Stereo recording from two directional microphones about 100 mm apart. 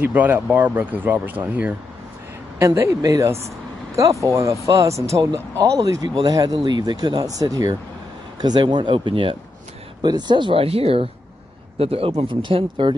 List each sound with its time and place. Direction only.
0.0 s speech: 20° right (ahead or behind)
2.6 s speech: 30° right (ahead or behind); by 9.4 s 60° right (ahead or behind)
10.0 s speech: 45° right (ahead or behind); by 12.4 s 75° right (ahead or behind)
12.4 s speech: 60° right (ahead or behind)